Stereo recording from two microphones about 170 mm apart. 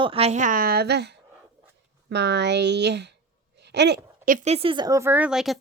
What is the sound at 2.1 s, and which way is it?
Speech, 85° right.